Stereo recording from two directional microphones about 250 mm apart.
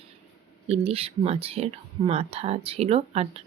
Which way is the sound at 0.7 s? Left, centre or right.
Right.